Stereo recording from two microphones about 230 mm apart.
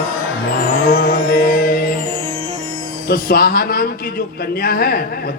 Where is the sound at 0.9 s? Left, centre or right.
Left.